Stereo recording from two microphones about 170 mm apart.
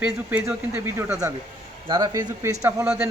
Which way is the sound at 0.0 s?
10° right (ahead or behind).